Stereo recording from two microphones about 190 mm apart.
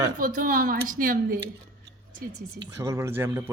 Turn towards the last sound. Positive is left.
turn(degrees=-10)  # may be behind; listen again after turning